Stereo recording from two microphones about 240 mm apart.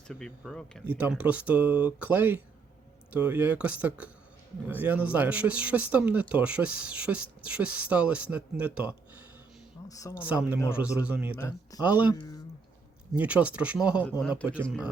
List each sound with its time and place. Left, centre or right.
0.1 s speech: centre
9.9 s speech: centre
10.7 s speech: centre
11.3 s speech: centre
11.8 s speech: centre
12.1 s speech: centre
13.1 s speech: centre